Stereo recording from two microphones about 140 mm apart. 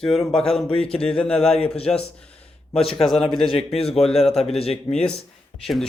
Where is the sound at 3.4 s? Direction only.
45° left (ahead or behind).